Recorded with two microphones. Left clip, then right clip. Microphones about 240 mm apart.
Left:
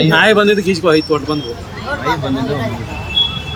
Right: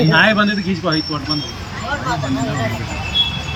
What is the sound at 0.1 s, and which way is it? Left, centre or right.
Speech, left.